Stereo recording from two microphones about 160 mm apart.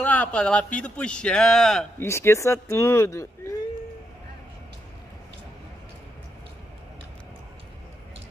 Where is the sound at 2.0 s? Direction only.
15° left (ahead or behind).